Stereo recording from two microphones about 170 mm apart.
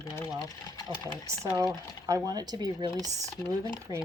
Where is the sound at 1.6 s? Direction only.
20° right (ahead or behind).